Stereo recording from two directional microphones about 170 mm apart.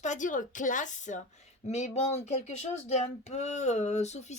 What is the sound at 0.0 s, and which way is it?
Speech, 45° left (ahead or behind).